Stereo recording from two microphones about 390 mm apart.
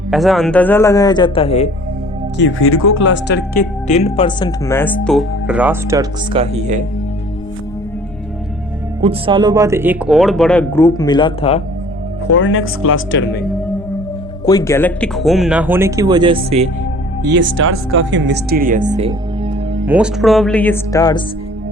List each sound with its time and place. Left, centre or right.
0.1 s speech: centre
2.4 s speech: left; by 6.8 s centre
9.0 s speech: centre
12.3 s speech: left
14.4 s speech: centre
17.3 s speech: right
19.9 s speech: centre